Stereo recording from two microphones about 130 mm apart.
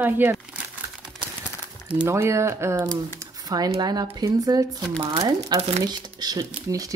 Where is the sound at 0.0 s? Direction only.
15° right (ahead or behind).